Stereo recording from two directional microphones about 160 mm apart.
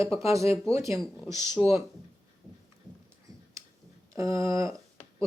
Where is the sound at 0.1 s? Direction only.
35° left (ahead or behind).